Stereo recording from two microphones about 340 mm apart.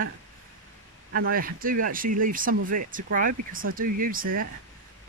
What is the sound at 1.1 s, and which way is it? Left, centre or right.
Speech, right.